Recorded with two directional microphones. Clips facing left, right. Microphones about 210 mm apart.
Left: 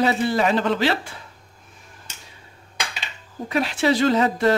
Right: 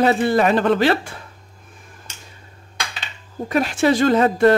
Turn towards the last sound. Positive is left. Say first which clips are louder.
# right 4 dB
turn(degrees=-50)  # may be behind; listen again after turning